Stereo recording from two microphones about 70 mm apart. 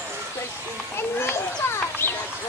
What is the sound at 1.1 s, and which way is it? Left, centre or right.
Children playing, left.